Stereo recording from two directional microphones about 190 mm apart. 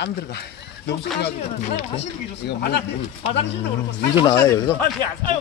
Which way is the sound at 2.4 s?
60° left (ahead or behind).